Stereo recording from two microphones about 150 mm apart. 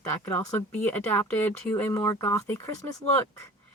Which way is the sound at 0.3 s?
10° left (ahead or behind).